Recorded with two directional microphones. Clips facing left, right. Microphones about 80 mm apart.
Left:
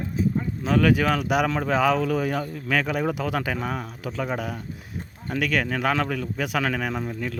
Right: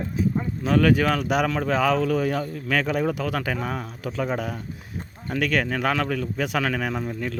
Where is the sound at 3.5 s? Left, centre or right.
Centre.